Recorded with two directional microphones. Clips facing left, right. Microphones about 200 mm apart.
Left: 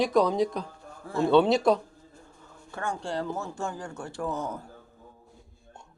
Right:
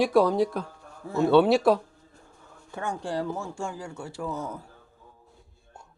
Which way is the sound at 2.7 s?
20° right (ahead or behind).